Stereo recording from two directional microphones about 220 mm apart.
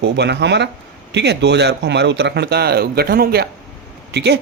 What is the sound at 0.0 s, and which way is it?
Speech, 50° right (ahead or behind).